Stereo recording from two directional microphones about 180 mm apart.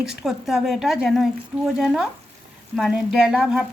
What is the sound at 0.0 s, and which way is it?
Speech, centre (ahead or behind).